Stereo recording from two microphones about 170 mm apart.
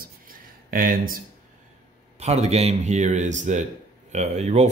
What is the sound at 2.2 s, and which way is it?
Speech, 40° right (ahead or behind).